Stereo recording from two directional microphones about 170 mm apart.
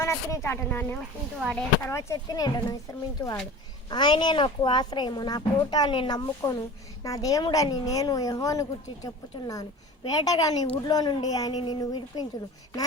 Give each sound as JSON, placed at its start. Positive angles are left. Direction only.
{"t": 0.0, "sound": "a child's voice", "side_deg": 15}